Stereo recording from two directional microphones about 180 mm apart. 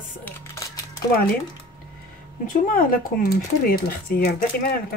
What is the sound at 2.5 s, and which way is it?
Speech, 50° left (ahead or behind).